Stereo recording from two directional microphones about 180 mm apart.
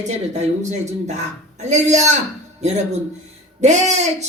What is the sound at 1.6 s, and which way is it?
Speech, 40° right (ahead or behind).